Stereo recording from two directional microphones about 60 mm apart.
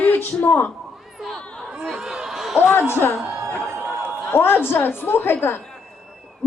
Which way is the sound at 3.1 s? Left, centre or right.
Centre.